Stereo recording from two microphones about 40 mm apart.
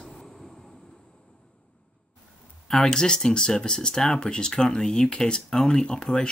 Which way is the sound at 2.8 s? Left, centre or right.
Centre.